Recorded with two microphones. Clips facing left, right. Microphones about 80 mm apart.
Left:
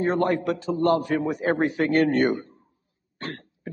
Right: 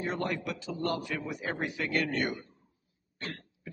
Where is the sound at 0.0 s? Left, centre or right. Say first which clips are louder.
Left 11 dB; left.